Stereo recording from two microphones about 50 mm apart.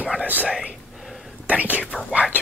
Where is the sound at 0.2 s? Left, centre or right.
Right.